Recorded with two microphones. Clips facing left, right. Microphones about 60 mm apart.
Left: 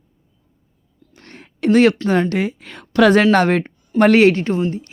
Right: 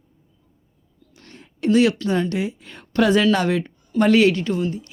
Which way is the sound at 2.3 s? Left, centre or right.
Left.